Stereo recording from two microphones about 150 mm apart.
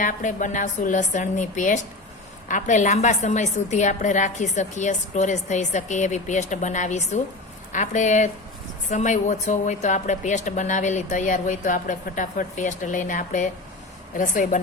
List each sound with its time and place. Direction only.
0.0 s a woman's voice: 60° left (ahead or behind)